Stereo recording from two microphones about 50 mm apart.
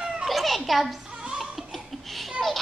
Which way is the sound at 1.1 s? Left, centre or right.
Right.